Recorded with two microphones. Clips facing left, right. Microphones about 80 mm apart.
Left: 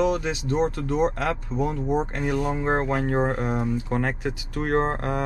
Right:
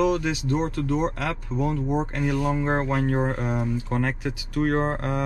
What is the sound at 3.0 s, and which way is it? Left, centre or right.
Speech, left.